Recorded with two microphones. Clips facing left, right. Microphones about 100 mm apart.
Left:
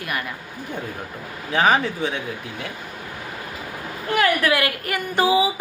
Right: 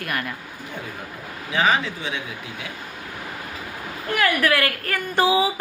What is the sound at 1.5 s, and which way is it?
Speech, 50° left (ahead or behind).